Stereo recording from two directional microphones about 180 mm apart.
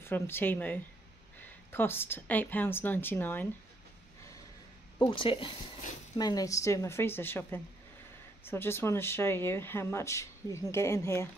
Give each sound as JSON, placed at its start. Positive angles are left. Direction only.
{"t": 0.0, "sound": "speech", "side_deg": 10}
{"t": 5.0, "sound": "speech", "side_deg": 30}